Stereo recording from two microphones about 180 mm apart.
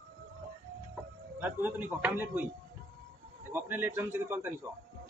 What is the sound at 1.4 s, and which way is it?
Speech, 10° right (ahead or behind).